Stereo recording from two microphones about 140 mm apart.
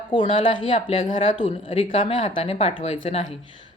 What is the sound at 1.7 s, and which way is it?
Speech, 45° left (ahead or behind).